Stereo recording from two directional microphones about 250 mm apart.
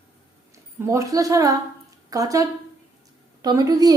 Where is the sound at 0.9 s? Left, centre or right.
Centre.